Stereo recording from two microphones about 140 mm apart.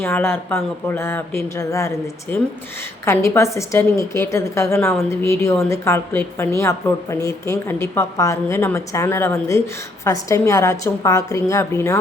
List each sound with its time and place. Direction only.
0.0 s speech: 15° left (ahead or behind)
3.1 s a woman's voice: 20° left (ahead or behind)